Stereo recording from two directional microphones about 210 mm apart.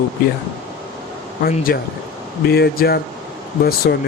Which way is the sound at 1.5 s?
45° left (ahead or behind).